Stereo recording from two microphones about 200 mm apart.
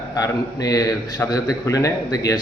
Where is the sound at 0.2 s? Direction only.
15° left (ahead or behind).